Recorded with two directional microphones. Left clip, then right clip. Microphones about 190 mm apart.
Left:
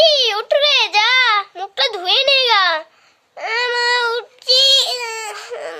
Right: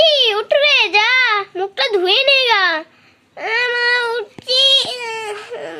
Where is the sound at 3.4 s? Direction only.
5° left (ahead or behind).